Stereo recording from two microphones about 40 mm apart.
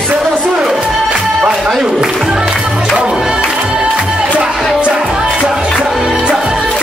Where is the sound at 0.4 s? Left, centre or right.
Centre.